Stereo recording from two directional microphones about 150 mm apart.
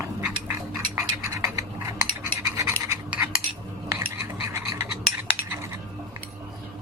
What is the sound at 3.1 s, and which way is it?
Cutlery, 10° right (ahead or behind).